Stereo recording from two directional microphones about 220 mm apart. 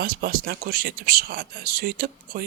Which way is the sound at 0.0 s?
45° right (ahead or behind).